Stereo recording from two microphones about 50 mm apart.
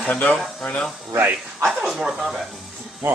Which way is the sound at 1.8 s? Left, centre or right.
Centre.